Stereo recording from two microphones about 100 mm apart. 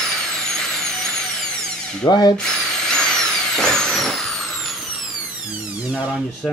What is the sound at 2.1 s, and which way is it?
Speech, 40° left (ahead or behind).